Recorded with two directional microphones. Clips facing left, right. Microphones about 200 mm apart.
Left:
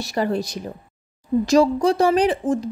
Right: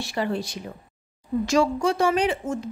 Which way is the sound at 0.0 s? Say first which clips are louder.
Left 4 dB; 40° left (ahead or behind).